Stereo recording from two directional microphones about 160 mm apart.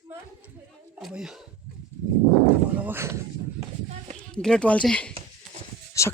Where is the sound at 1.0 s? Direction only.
5° right (ahead or behind).